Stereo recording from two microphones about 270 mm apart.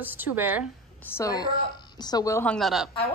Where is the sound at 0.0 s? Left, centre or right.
Centre.